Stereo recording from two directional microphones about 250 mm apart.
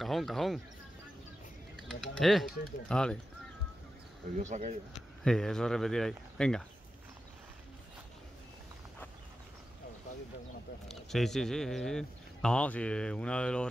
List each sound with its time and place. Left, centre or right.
0.0 s speech: centre
1.9 s speech: centre
4.4 s speech: right
5.2 s speech: centre
10.9 s speech: centre